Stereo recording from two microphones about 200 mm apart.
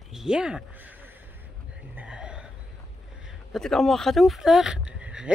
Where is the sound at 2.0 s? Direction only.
5° right (ahead or behind).